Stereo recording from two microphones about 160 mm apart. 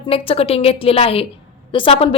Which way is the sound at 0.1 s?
35° left (ahead or behind).